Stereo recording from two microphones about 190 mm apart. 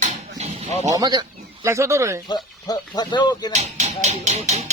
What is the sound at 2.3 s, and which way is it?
Speech, 20° left (ahead or behind).